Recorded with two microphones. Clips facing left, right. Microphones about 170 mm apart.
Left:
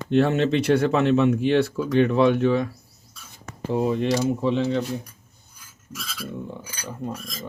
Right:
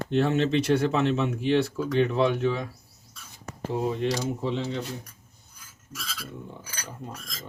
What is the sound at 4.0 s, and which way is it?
Speech, 65° left (ahead or behind).